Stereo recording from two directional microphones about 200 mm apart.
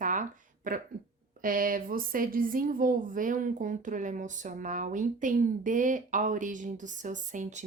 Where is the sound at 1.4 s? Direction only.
45° right (ahead or behind).